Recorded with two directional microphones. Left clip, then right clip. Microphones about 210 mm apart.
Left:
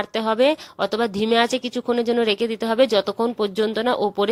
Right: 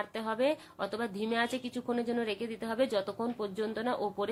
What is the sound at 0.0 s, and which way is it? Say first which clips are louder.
A woman's voice: left 13 dB; 45° left (ahead or behind).